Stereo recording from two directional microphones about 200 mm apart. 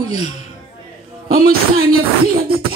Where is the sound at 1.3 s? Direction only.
45° right (ahead or behind).